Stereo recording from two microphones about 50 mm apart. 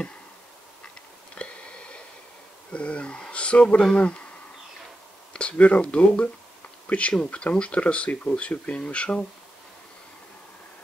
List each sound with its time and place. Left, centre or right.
1.3 s a sound: left
2.7 s speech: left
5.3 s speech: left